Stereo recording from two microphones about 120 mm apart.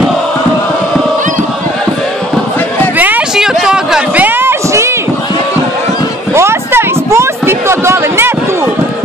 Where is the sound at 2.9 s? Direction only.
15° right (ahead or behind).